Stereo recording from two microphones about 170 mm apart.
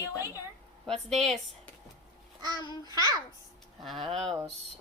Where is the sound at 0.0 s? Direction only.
20° left (ahead or behind).